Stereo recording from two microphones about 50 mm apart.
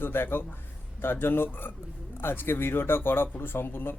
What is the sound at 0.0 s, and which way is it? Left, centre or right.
Speech, left.